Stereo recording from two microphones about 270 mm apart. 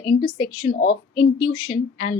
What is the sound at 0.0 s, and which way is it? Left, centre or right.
A woman's voice, centre.